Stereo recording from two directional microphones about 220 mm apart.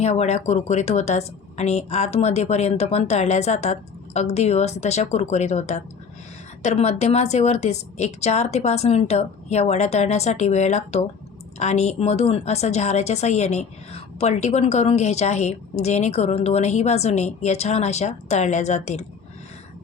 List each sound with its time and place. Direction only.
0.0 s speech: 30° left (ahead or behind)